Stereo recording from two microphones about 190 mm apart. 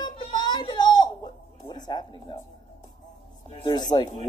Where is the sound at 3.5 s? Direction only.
20° left (ahead or behind).